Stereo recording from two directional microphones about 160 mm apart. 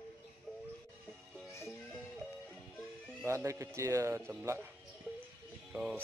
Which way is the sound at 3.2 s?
20° right (ahead or behind).